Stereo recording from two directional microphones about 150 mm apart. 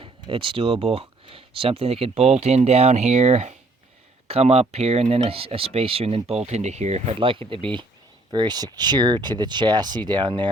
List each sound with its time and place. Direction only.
0.0 s speech: 35° right (ahead or behind)